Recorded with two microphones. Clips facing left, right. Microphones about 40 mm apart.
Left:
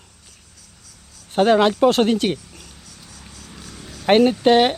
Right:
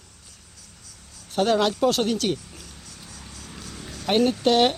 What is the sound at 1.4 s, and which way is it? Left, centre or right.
A man's voice, left.